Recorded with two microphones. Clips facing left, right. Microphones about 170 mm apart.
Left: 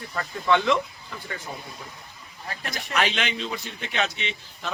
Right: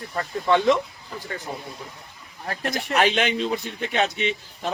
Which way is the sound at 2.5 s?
50° right (ahead or behind).